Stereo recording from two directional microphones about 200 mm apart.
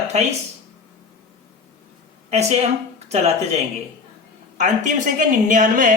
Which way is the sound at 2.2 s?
35° right (ahead or behind).